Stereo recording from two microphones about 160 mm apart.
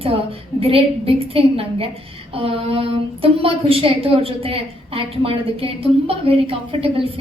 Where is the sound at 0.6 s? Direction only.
35° right (ahead or behind).